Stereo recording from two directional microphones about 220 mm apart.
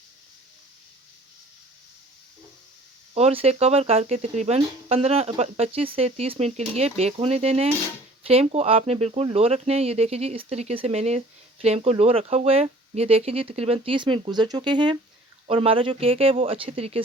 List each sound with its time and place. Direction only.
3.2 s speech: 30° right (ahead or behind)